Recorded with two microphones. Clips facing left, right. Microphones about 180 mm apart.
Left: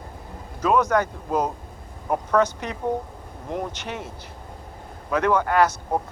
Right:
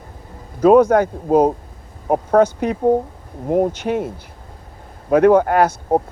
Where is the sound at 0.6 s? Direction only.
55° right (ahead or behind).